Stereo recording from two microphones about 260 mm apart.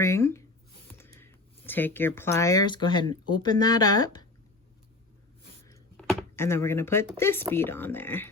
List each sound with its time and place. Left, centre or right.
0.0 s speech: centre
5.6 s a sound: centre
6.1 s speech: centre